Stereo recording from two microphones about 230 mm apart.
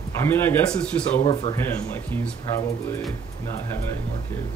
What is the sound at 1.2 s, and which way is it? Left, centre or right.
Speech, left.